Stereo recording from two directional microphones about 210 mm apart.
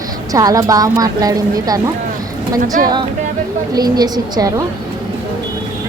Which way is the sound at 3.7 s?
20° right (ahead or behind).